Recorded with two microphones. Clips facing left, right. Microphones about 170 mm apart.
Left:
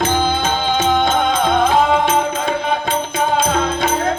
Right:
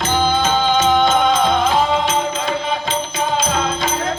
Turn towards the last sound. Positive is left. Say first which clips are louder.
# left 2 dB
turn(degrees=60)  # may be behind; listen again after turning